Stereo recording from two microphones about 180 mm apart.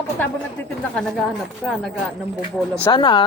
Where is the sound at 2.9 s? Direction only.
25° left (ahead or behind).